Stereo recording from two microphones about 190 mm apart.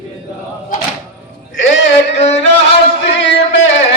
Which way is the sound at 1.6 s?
80° left.